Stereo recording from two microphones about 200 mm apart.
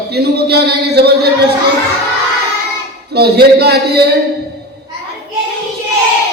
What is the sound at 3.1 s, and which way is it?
Speech, 50° right (ahead or behind).